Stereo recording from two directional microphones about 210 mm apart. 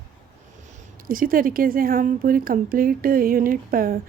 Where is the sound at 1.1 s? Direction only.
40° right (ahead or behind).